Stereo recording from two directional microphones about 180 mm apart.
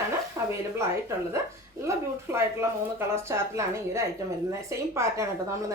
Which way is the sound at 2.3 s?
15° right (ahead or behind).